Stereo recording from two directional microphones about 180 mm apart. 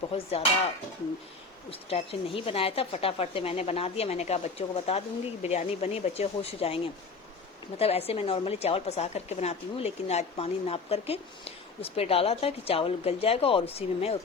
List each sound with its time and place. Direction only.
0.1 s a woman's voice: 35° left (ahead or behind)
1.7 s a woman's voice: 30° left (ahead or behind)